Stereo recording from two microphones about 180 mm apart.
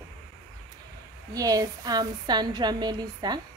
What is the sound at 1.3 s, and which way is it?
Speech, 20° right (ahead or behind).